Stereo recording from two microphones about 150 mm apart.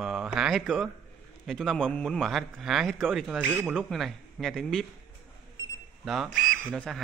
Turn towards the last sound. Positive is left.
turn(degrees=5)  # may be behind; listen again after turning